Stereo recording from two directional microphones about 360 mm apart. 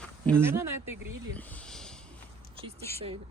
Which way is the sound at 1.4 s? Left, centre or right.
Centre.